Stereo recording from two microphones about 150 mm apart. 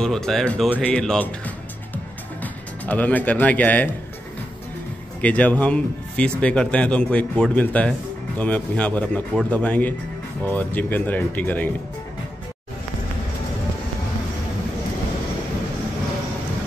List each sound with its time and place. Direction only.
0.0 s a man's voice: 5° left (ahead or behind)
5.2 s a man's voice: 10° left (ahead or behind)